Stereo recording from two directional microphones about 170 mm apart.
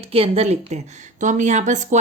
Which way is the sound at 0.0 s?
35° right (ahead or behind).